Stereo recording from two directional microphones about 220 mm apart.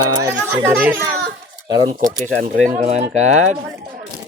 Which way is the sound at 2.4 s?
35° right (ahead or behind).